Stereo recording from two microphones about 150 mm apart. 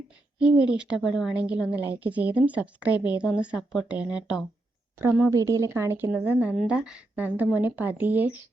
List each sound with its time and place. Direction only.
0.3 s a woman's voice: 5° right (ahead or behind)